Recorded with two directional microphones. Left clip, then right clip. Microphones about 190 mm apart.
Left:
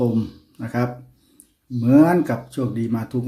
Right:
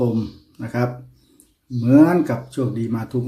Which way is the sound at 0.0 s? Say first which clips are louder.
Even; 10° left (ahead or behind).